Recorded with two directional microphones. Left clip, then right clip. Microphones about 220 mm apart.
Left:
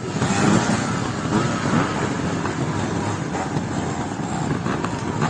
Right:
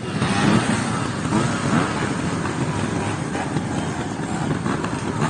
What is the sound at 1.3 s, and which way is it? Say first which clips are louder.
Vehicle: even; 55° right (ahead or behind).